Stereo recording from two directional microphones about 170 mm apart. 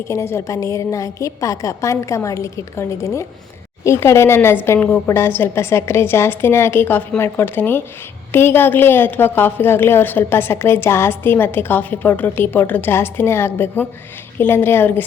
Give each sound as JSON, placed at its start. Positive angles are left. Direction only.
{"t": 0.1, "sound": "a woman's voice", "side_deg": 15}